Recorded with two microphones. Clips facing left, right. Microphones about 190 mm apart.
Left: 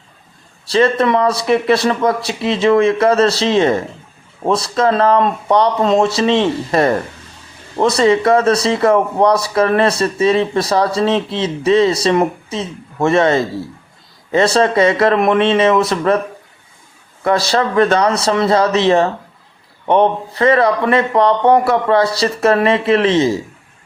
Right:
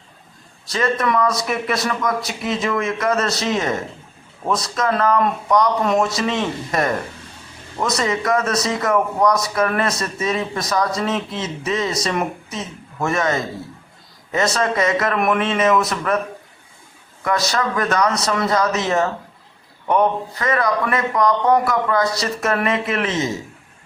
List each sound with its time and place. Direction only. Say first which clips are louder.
0.6 s speech: left 7 dB; 30° left (ahead or behind)
17.2 s speech: left 6 dB; 30° left (ahead or behind)